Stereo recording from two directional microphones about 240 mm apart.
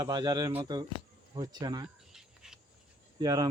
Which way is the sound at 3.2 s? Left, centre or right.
Centre.